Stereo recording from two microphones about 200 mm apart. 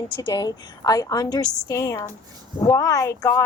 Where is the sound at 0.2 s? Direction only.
20° left (ahead or behind).